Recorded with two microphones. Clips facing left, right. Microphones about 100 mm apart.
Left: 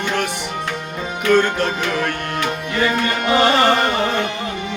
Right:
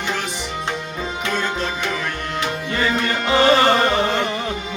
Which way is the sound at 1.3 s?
60° left (ahead or behind).